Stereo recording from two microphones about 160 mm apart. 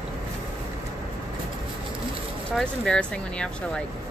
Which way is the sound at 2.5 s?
5° left (ahead or behind).